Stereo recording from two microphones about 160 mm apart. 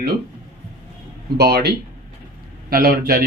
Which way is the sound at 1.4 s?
85° right.